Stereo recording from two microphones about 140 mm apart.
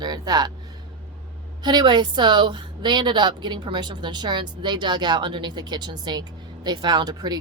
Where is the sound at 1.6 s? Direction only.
30° right (ahead or behind).